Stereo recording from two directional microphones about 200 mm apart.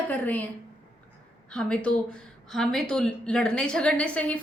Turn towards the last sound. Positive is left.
turn(degrees=5)  # may be behind; listen again after turning